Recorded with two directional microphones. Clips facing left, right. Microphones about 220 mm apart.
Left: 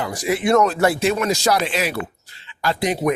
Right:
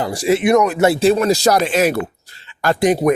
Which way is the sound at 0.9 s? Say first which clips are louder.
Right 5 dB; 30° right (ahead or behind).